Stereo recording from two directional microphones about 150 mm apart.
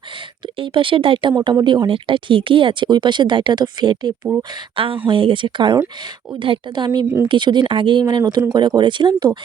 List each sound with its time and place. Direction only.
0.6 s speech: 35° right (ahead or behind)